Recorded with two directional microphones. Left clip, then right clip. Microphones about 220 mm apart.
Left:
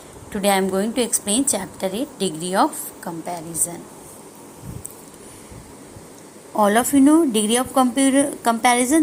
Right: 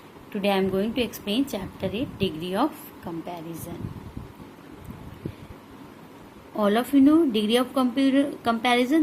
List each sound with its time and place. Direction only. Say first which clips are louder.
0.3 s a woman's voice: left 5 dB; 15° left (ahead or behind)
6.6 s a woman's voice: left 5 dB; 15° left (ahead or behind)